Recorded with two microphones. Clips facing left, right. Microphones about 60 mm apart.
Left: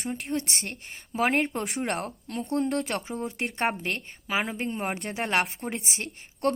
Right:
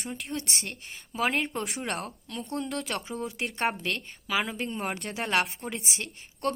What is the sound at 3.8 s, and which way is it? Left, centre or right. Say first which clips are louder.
A woman's voice: even; left.